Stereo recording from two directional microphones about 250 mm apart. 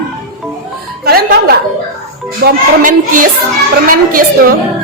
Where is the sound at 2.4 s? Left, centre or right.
Right.